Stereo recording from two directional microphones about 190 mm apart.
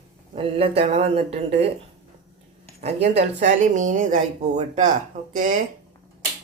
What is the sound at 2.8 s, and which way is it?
Speech, 35° right (ahead or behind).